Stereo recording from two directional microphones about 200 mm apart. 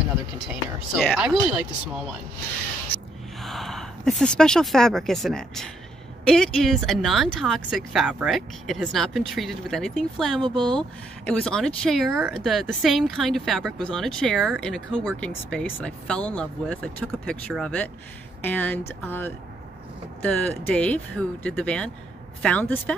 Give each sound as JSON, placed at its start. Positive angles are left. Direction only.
{"t": 0.9, "sound": "speech", "side_deg": 0}
{"t": 3.4, "sound": "a sound", "side_deg": 0}
{"t": 4.2, "sound": "speech", "side_deg": 5}
{"t": 10.4, "sound": "speech", "side_deg": -25}
{"t": 10.8, "sound": "speech", "side_deg": 5}